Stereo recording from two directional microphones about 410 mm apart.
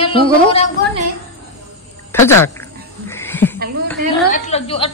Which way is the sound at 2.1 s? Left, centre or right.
Centre.